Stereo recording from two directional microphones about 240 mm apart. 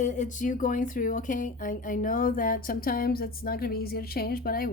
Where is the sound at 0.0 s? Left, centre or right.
Left.